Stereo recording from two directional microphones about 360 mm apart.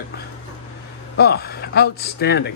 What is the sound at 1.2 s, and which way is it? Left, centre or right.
A man's voice, left.